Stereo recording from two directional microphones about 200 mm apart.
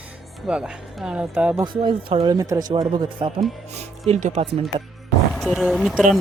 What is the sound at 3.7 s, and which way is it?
Speech, 35° right (ahead or behind).